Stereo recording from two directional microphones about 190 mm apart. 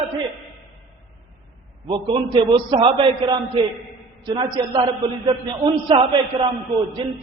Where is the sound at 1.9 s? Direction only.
25° right (ahead or behind).